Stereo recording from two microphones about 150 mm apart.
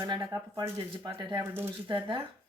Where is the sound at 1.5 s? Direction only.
15° right (ahead or behind).